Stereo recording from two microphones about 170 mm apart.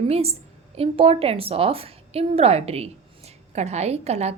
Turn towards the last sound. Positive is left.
turn(degrees=-40)  # may be behind; listen again after turning